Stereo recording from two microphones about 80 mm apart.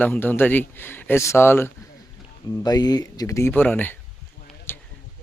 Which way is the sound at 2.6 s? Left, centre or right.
Left.